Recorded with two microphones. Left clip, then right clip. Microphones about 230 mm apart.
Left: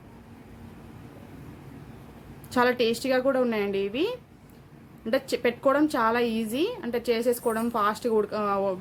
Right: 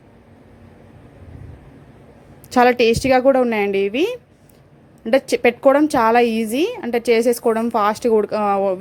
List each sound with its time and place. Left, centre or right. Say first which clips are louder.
2.5 s a woman's voice: right 10 dB; right